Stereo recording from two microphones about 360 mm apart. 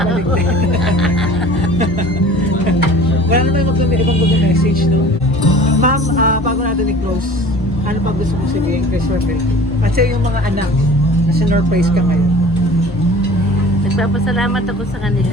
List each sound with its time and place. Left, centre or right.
5.8 s music: right
11.3 s speech: right
14.0 s speech: centre